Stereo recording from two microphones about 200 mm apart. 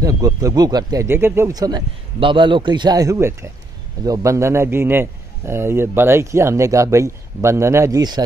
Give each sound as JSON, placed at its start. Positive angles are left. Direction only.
{"t": 0.0, "sound": "speech", "side_deg": -15}